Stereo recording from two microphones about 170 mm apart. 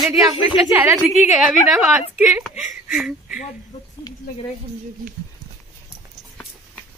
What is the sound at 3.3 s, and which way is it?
Speech, 50° left (ahead or behind).